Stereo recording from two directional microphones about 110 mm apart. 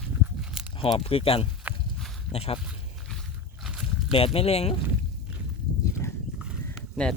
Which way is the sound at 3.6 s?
5° right (ahead or behind).